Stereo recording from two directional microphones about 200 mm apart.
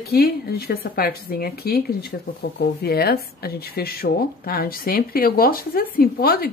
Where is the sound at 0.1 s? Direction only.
50° left (ahead or behind).